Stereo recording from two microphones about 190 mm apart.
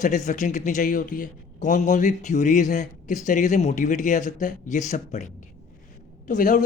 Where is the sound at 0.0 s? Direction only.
40° left (ahead or behind).